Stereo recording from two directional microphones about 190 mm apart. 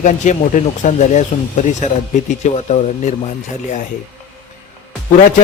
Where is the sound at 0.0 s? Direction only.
40° left (ahead or behind).